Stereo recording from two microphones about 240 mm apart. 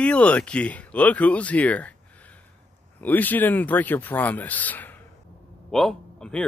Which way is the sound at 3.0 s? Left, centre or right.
Centre.